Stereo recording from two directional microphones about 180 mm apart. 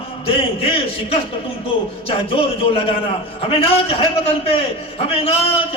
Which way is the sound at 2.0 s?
30° left (ahead or behind).